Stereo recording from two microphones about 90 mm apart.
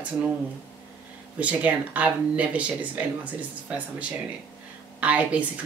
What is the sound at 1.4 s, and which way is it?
Speech, 15° right (ahead or behind).